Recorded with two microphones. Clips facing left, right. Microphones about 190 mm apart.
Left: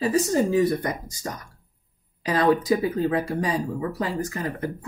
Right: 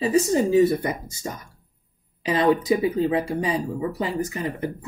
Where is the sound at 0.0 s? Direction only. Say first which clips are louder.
Right 2 dB; 20° right (ahead or behind).